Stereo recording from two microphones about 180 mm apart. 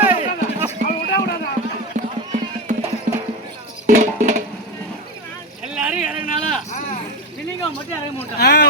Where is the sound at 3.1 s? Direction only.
45° right (ahead or behind).